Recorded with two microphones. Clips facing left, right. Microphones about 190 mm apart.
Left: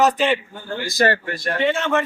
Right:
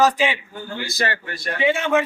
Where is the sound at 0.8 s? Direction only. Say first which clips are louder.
Left 8 dB; 45° left (ahead or behind).